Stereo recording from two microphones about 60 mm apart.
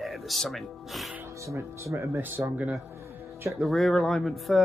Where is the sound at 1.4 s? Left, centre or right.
Right.